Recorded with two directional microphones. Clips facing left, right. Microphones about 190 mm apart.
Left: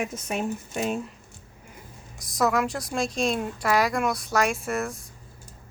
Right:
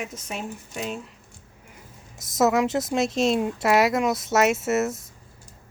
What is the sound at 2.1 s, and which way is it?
A woman's voice, 25° right (ahead or behind).